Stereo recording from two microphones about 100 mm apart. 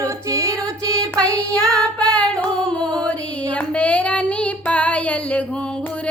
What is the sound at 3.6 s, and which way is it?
Child singing, 15° left (ahead or behind).